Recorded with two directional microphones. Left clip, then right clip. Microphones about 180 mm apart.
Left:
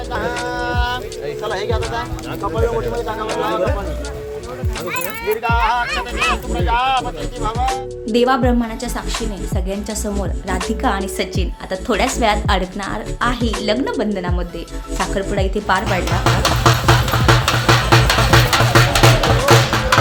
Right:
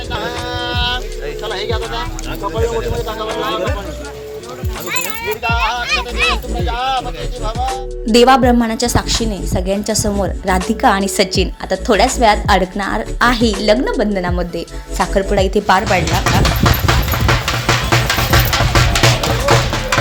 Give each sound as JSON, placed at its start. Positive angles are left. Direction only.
{"t": 0.4, "sound": "music", "side_deg": -20}
{"t": 4.9, "sound": "speech", "side_deg": -45}
{"t": 7.6, "sound": "speech", "side_deg": 0}
{"t": 8.1, "sound": "speech", "side_deg": -35}
{"t": 15.9, "sound": "music", "side_deg": 30}